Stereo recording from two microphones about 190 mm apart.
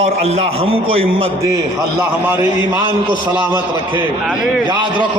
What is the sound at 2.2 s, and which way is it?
Speech, 10° right (ahead or behind).